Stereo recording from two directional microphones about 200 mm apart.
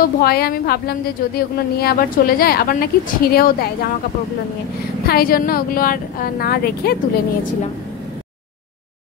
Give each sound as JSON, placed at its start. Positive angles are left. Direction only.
{"t": 0.0, "sound": "a woman's voice", "side_deg": 50}
{"t": 5.0, "sound": "a woman's voice", "side_deg": 50}